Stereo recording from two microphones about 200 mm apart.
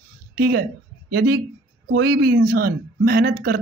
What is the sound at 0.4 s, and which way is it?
Speech, 50° right (ahead or behind).